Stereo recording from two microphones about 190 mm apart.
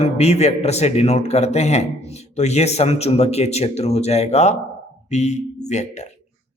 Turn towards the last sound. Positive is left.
turn(degrees=35)  # may be behind; listen again after turning